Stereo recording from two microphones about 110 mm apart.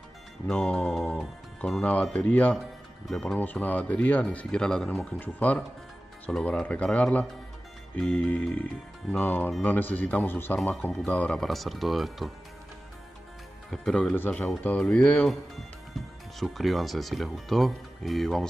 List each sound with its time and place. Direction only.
0.5 s speech: 10° left (ahead or behind)
13.7 s speech: 5° left (ahead or behind)
14.1 s speech: 15° left (ahead or behind)
16.3 s speech: centre (ahead or behind)